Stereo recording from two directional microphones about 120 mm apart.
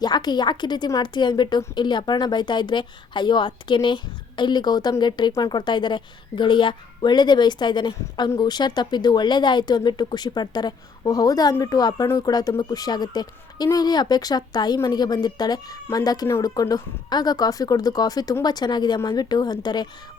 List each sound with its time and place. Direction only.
0.0 s a woman's voice: 35° left (ahead or behind)